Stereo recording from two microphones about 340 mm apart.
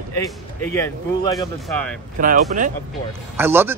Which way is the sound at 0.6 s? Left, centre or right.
Centre.